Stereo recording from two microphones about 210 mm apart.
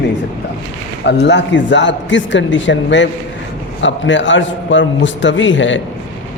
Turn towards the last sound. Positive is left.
turn(degrees=60)  # may be behind; listen again after turning